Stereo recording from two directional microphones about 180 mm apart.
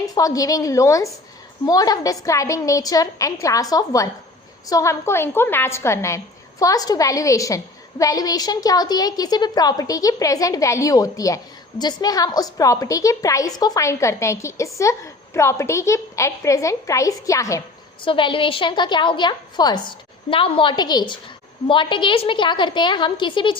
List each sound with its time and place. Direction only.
0.0 s a woman's voice: 20° left (ahead or behind)
18.0 s a woman's voice: 30° left (ahead or behind)